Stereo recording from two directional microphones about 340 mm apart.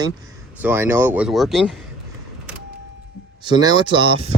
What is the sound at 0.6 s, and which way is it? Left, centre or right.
Speech, centre.